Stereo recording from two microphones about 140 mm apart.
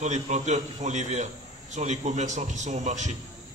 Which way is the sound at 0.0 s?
55° right (ahead or behind).